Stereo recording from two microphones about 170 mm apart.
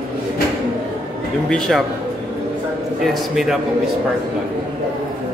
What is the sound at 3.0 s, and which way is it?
Speech, centre (ahead or behind).